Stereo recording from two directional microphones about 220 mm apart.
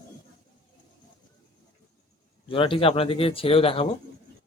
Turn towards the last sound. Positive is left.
turn(degrees=25)  # may be behind; listen again after turning